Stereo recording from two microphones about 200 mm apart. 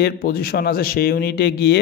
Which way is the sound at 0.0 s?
50° left (ahead or behind).